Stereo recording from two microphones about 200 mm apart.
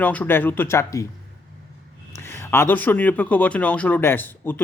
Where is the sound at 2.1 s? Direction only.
10° left (ahead or behind).